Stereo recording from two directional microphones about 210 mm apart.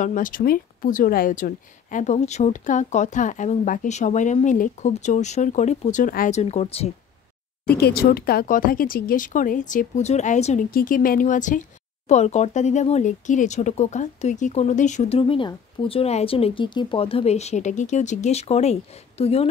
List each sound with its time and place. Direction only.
0.0 s speech: 40° left (ahead or behind)
7.6 s speech: 45° left (ahead or behind); by 19.4 s 30° left (ahead or behind)